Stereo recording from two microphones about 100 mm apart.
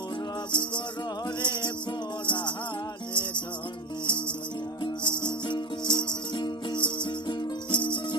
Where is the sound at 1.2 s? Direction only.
50° left (ahead or behind).